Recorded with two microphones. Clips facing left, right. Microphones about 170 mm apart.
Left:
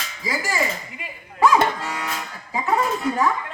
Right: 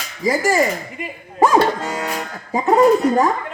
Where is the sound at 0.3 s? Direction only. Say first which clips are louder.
Right 10 dB; 45° right (ahead or behind).